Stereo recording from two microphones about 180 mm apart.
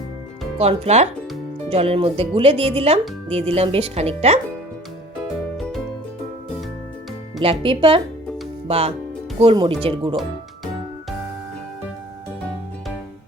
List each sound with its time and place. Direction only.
0.6 s speech: 35° right (ahead or behind)
7.6 s speech: 30° right (ahead or behind)